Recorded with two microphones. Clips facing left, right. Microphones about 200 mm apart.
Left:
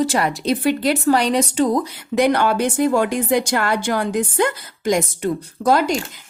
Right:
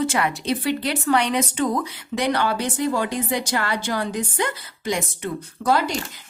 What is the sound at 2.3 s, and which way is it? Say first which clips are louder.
A woman's voice: left 5 dB; 50° left (ahead or behind).